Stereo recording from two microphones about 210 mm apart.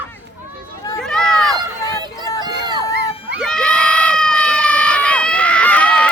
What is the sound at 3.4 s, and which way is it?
Crowd, 5° left (ahead or behind).